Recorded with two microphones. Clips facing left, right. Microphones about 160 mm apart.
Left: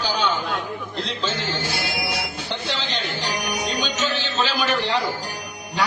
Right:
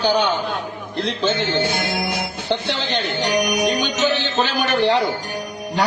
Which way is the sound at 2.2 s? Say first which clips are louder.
Right 6 dB; 55° right (ahead or behind).